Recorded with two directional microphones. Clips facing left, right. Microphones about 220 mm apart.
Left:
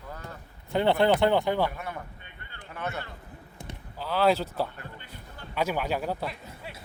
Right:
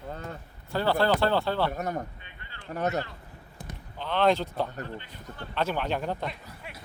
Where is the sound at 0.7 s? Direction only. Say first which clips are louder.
Left 2 dB; 20° left (ahead or behind).